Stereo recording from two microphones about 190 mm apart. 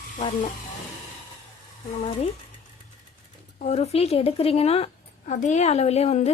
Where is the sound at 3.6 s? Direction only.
35° left (ahead or behind).